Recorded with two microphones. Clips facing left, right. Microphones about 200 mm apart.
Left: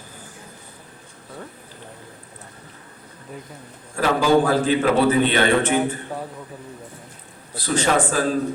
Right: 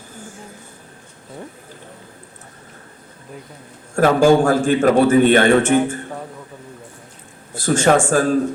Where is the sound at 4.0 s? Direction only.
50° right (ahead or behind).